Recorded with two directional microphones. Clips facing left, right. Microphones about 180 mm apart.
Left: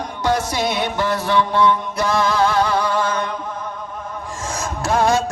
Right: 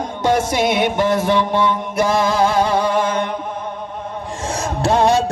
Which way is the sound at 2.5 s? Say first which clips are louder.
Right 2 dB; 25° right (ahead or behind).